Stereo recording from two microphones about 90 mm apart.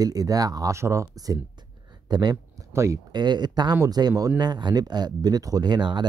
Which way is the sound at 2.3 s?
35° right (ahead or behind).